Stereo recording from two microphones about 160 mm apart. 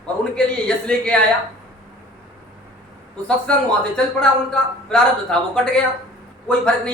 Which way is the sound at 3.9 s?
5° left (ahead or behind).